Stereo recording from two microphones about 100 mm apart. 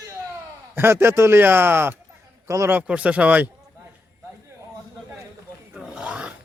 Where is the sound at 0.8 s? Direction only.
25° right (ahead or behind).